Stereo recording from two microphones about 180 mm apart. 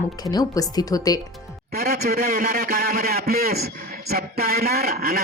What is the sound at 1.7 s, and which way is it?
A man's voice, 60° right (ahead or behind).